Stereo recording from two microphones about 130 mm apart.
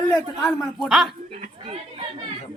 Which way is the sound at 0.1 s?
5° left (ahead or behind).